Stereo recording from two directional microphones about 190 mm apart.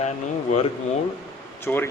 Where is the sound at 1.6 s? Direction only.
10° left (ahead or behind).